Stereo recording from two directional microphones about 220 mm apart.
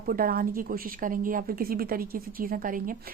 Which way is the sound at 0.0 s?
40° right (ahead or behind).